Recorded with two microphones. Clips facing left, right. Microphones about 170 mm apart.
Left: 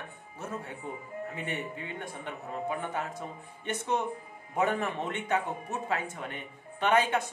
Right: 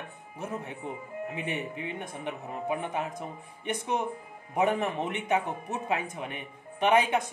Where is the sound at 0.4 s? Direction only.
20° right (ahead or behind).